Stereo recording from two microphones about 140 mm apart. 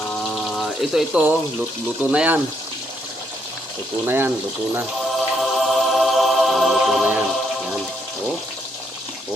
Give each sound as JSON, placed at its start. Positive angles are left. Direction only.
{"t": 0.1, "sound": "water", "side_deg": 5}
{"t": 2.0, "sound": "speech", "side_deg": -10}
{"t": 4.0, "sound": "speech", "side_deg": -15}
{"t": 5.4, "sound": "music", "side_deg": 0}